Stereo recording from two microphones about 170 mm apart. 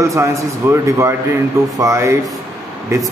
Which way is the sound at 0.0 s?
15° right (ahead or behind).